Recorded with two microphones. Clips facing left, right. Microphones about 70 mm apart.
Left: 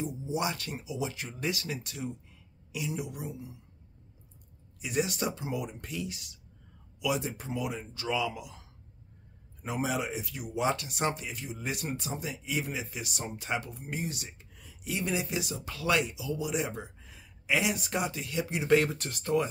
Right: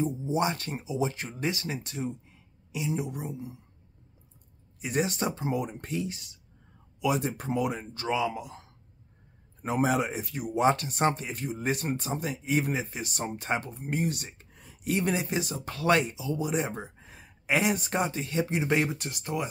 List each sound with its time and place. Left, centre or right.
0.0 s speech: right
4.7 s speech: right
7.0 s speech: right; by 19.4 s centre